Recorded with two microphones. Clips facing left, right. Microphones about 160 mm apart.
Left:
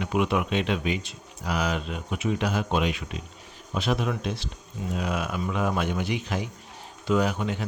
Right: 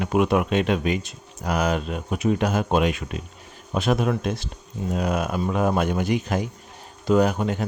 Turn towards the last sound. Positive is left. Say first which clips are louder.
# right 5 dB
turn(degrees=-45)  # may be behind; listen again after turning